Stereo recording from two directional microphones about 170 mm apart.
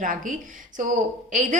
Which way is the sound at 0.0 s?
55° right (ahead or behind).